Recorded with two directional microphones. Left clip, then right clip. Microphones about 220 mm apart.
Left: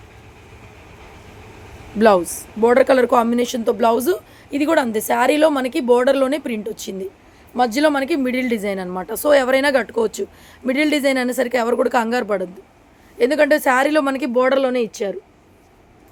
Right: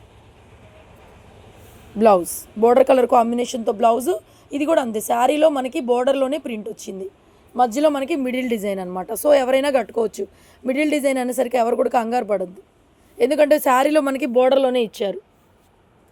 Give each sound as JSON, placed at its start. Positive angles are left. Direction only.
{"t": 2.0, "sound": "speech", "side_deg": -15}